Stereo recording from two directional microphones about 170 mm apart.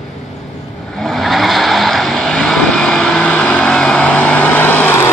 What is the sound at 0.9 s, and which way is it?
Vehicle, centre (ahead or behind).